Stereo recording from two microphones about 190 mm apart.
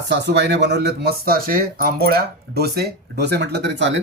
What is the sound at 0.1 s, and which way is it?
Speech, 65° right (ahead or behind).